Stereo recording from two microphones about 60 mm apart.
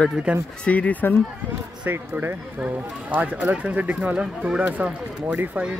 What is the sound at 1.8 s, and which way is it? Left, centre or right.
Speech, right.